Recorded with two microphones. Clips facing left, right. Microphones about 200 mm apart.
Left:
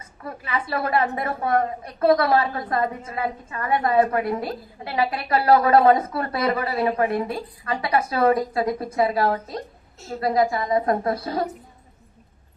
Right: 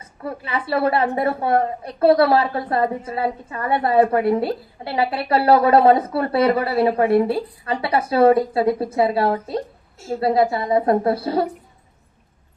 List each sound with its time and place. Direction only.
0.0 s a woman's voice: 30° right (ahead or behind)